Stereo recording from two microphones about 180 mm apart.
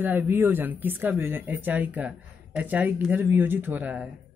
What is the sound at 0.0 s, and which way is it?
Speech, 10° right (ahead or behind).